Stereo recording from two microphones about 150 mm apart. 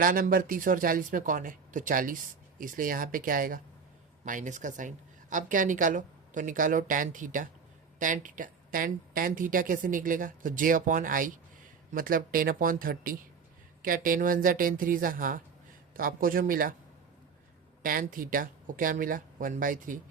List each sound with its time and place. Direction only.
0.0 s speech: 70° right (ahead or behind)
4.3 s speech: 55° right (ahead or behind)
17.8 s speech: 70° right (ahead or behind)